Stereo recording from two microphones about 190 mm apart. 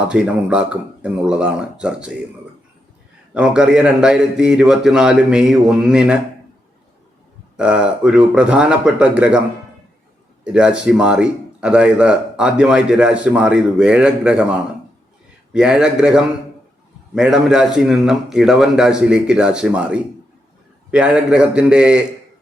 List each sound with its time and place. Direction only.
0.1 s a man's voice: 5° right (ahead or behind)
3.3 s a man's voice: 5° right (ahead or behind)
7.5 s a man's voice: 5° right (ahead or behind)
10.4 s a man's voice: 5° right (ahead or behind)
15.5 s a man's voice: 5° right (ahead or behind)